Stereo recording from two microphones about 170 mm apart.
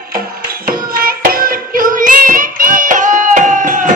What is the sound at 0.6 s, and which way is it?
Music, 60° right (ahead or behind).